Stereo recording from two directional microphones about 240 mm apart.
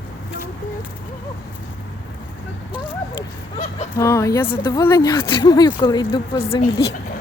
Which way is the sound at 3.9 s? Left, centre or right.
Centre.